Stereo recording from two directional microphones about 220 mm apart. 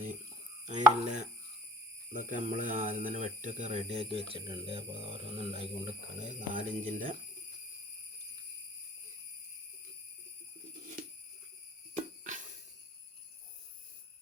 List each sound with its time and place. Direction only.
0.6 s speech: 35° right (ahead or behind)
12.2 s jingle bell: 35° right (ahead or behind)